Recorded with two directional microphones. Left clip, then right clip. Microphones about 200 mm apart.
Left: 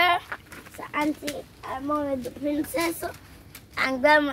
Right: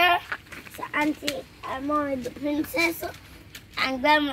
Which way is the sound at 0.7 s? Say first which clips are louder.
Right 1 dB; 25° right (ahead or behind).